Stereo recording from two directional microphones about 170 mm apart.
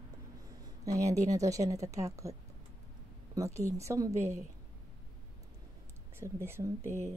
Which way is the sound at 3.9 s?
15° right (ahead or behind).